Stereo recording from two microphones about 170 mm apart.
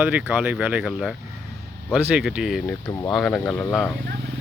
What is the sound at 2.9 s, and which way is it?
Speech, 20° left (ahead or behind).